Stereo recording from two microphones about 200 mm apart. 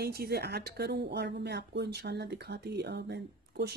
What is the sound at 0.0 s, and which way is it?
Speech, 50° right (ahead or behind).